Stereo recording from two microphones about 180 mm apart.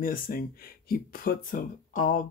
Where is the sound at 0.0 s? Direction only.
55° left (ahead or behind).